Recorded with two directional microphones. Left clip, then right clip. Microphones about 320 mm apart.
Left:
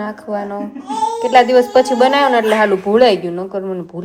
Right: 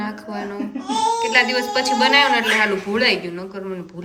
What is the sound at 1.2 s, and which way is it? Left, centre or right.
Speech, left.